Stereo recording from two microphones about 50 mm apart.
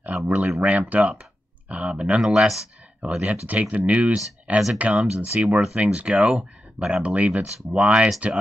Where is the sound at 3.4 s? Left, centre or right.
Right.